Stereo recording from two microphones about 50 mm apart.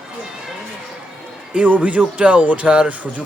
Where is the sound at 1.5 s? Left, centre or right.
Right.